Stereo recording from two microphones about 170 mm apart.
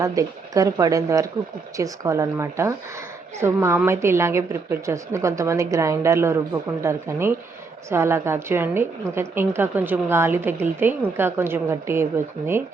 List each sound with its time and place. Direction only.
0.0 s a woman's voice: 20° right (ahead or behind)